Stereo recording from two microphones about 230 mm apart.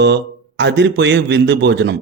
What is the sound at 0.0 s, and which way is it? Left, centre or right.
A man's voice, right.